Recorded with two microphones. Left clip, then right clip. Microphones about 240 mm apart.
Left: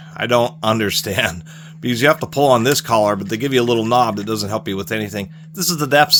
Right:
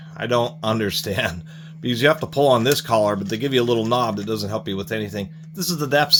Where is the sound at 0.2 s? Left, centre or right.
Left.